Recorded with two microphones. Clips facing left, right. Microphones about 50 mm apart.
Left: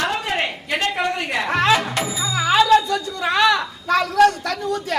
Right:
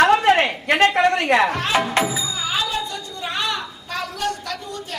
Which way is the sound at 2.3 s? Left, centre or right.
Left.